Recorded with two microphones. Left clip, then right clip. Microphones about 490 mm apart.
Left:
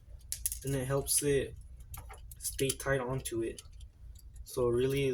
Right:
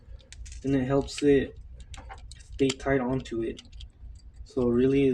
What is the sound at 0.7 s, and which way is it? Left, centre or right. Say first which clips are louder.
Speech: right 7 dB; left.